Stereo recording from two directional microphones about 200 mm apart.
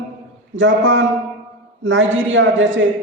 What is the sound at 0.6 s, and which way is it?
A man's voice, 70° right (ahead or behind).